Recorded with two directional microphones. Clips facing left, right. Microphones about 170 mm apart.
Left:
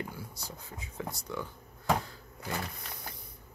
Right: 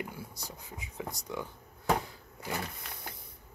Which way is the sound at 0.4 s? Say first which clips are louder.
Even; 15° right (ahead or behind).